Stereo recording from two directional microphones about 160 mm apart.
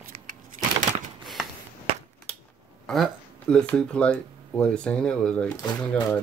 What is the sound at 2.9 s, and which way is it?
Speech, 5° left (ahead or behind).